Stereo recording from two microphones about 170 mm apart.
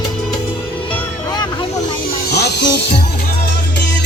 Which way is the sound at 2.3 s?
75° left (ahead or behind).